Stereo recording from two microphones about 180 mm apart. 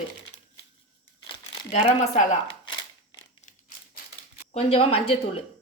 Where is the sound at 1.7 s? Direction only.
40° left (ahead or behind).